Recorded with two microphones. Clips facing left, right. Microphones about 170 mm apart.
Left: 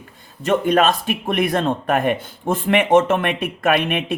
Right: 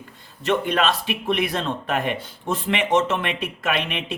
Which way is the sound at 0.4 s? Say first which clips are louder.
Left 5 dB; 45° left (ahead or behind).